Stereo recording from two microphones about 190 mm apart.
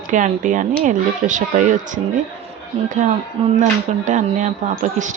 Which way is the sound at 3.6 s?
40° right (ahead or behind).